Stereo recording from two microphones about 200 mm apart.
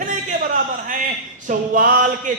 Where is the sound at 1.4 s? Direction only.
45° right (ahead or behind).